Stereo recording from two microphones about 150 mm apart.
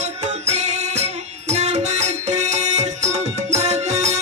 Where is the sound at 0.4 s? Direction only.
45° right (ahead or behind).